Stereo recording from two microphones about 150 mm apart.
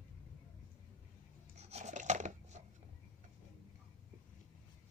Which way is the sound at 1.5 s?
45° right (ahead or behind).